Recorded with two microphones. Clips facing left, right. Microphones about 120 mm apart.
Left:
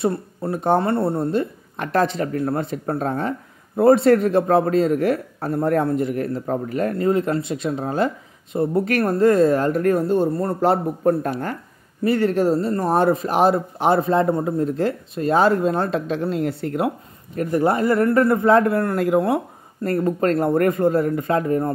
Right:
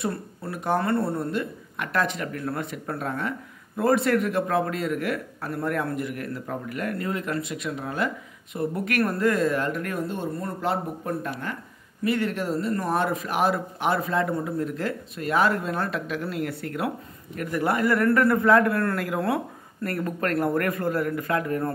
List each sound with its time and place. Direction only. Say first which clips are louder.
0.0 s speech: left 8 dB; 25° left (ahead or behind)